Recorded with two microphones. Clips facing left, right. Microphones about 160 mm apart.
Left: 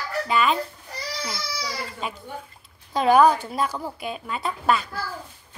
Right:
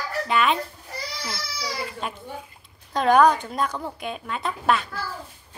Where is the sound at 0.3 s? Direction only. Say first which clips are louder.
Even; centre (ahead or behind).